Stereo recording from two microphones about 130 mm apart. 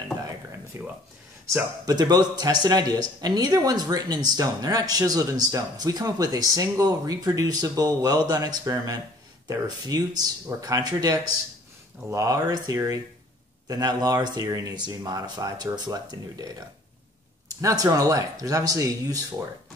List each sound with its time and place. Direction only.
0.7 s speech: 20° right (ahead or behind)
2.0 s speech: 35° right (ahead or behind)
17.6 s speech: 25° right (ahead or behind)